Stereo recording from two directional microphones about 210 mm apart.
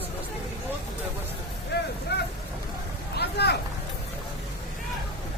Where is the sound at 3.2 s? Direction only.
50° left (ahead or behind).